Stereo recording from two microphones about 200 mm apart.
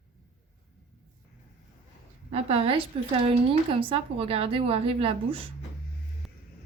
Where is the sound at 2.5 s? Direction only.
25° right (ahead or behind).